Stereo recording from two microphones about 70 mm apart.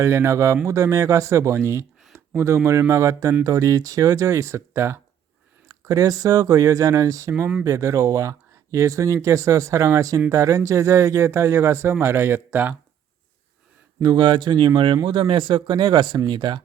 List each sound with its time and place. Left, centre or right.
0.0 s speech: right
2.1 s a sound: right
2.6 s speech: right
5.6 s speech: right
12.5 s speech: right
14.0 s speech: right